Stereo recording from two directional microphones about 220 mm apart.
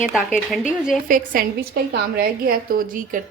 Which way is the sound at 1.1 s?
40° right (ahead or behind).